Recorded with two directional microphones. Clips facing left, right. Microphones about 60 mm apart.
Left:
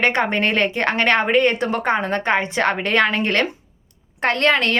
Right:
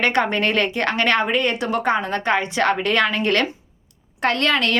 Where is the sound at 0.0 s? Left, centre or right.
Left.